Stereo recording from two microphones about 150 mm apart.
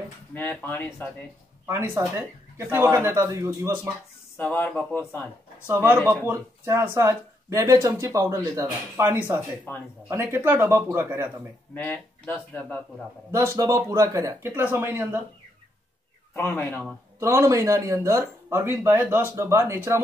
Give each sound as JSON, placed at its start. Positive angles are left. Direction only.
{"t": 0.3, "sound": "speech", "side_deg": 10}
{"t": 1.7, "sound": "speech", "side_deg": -20}
{"t": 4.4, "sound": "speech", "side_deg": 10}
{"t": 5.8, "sound": "speech", "side_deg": -10}
{"t": 9.7, "sound": "speech", "side_deg": 15}
{"t": 10.0, "sound": "speech", "side_deg": -15}
{"t": 11.7, "sound": "speech", "side_deg": 10}
{"t": 13.3, "sound": "speech", "side_deg": -20}
{"t": 16.3, "sound": "speech", "side_deg": 15}
{"t": 16.8, "sound": "speech", "side_deg": -20}